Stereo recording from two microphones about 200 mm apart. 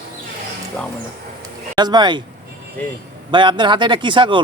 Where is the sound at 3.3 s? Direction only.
25° right (ahead or behind).